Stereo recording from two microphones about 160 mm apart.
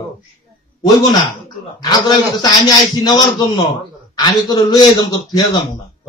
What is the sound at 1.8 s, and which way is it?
A man's voice, 25° left (ahead or behind).